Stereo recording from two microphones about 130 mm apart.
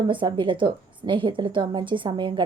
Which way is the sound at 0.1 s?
40° right (ahead or behind).